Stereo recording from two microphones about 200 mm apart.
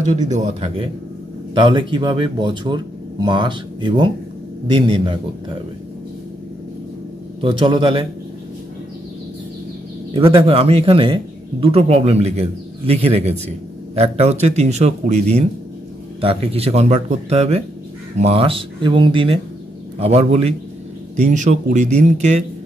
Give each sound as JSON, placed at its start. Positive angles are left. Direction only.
{"t": 0.3, "sound": "a man's voice", "side_deg": -35}
{"t": 7.4, "sound": "speech", "side_deg": -25}
{"t": 10.1, "sound": "a man's voice", "side_deg": -25}